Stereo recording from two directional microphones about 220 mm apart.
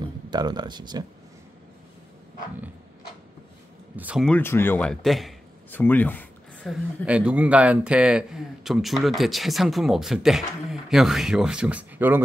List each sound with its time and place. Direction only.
0.3 s speech: 20° right (ahead or behind)
3.9 s speech: 5° right (ahead or behind)
4.3 s speech: 10° left (ahead or behind); by 12.2 s 5° right (ahead or behind)